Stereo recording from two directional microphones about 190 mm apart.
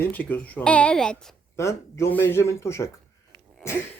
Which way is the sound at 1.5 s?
15° left (ahead or behind).